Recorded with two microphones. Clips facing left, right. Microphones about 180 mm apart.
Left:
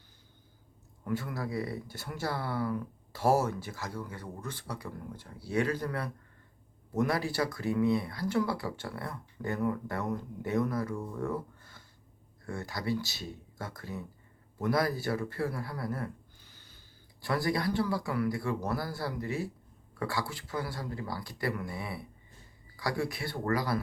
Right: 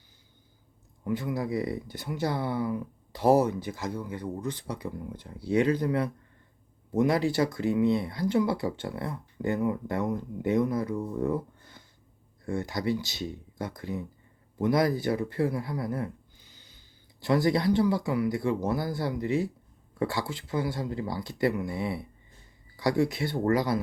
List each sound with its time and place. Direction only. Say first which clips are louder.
1.0 s speech: right 5 dB; 15° right (ahead or behind)